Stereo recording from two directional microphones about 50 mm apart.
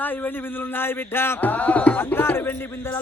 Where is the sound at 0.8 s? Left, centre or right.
Left.